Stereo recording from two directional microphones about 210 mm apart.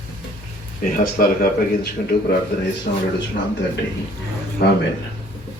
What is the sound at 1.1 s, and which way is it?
Speech, 45° left (ahead or behind).